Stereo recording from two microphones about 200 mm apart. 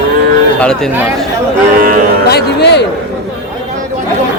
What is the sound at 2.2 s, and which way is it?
Speech, 55° left (ahead or behind).